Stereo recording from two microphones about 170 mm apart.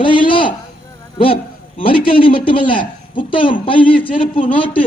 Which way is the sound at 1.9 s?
30° left (ahead or behind).